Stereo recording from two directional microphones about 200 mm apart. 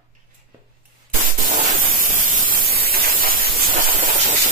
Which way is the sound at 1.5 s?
45° right (ahead or behind).